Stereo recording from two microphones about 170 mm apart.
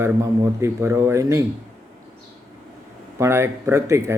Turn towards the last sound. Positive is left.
turn(degrees=-15)  # may be behind; listen again after turning